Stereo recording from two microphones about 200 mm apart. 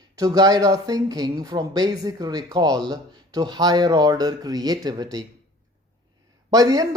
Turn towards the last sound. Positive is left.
turn(degrees=-20)  # may be behind; listen again after turning